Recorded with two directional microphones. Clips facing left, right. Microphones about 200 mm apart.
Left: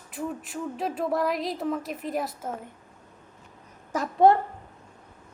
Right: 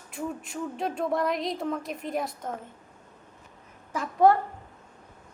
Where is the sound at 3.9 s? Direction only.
45° left (ahead or behind).